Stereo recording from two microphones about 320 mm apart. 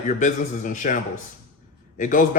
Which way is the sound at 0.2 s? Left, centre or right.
Left.